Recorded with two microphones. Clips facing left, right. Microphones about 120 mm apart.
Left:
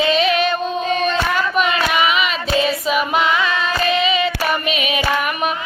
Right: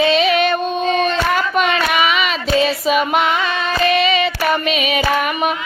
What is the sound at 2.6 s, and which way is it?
Female singing, 25° right (ahead or behind).